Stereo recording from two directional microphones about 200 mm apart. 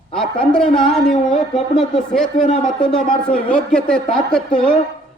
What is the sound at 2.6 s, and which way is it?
A man's voice, 5° left (ahead or behind).